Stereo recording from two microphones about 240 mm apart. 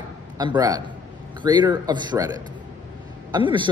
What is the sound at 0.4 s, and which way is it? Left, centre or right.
A man's voice, centre.